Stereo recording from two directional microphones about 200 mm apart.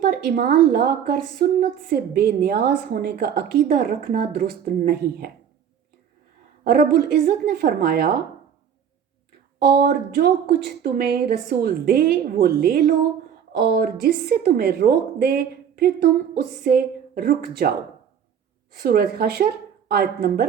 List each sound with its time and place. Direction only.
0.0 s a woman's voice: 50° right (ahead or behind)
6.7 s a woman's voice: 50° right (ahead or behind)
9.6 s a woman's voice: 50° right (ahead or behind)